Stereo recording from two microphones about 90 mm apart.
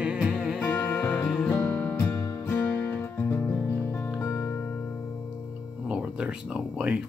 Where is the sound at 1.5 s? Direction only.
25° left (ahead or behind).